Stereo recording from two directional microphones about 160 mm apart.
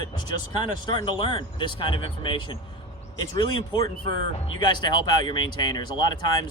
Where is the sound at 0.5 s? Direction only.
30° left (ahead or behind).